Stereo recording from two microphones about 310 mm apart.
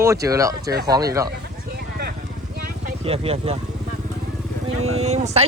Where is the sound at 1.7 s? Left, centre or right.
Right.